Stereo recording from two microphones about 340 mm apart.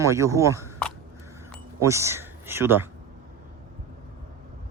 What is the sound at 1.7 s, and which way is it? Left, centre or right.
Speech, centre.